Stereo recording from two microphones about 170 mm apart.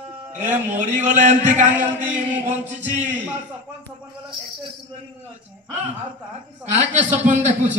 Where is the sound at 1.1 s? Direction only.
45° right (ahead or behind).